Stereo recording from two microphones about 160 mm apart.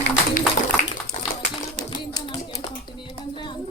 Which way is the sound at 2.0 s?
30° left (ahead or behind).